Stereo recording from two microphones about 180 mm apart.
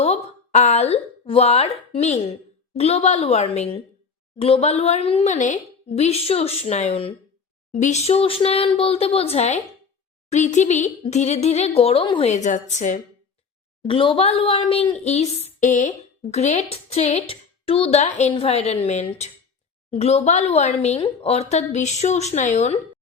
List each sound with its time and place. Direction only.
0.0 s speech: 35° left (ahead or behind)
12.3 s a woman's voice: 45° left (ahead or behind)
13.8 s speech: 30° left (ahead or behind)